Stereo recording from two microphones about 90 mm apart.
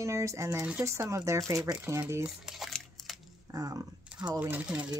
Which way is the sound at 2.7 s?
Centre (ahead or behind).